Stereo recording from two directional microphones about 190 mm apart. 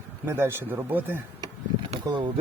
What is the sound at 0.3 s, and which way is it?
Speech, 15° right (ahead or behind).